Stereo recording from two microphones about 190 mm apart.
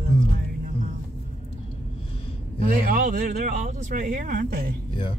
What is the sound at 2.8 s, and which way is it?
Speech, 45° right (ahead or behind).